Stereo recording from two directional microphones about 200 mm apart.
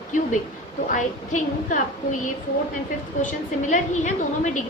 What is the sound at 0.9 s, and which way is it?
A woman's voice, 40° left (ahead or behind).